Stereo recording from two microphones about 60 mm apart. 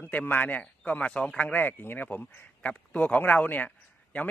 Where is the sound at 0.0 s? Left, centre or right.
Left.